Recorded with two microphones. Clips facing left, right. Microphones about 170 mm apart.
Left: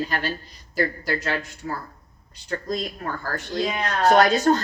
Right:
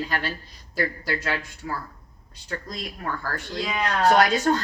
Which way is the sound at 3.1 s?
40° left (ahead or behind).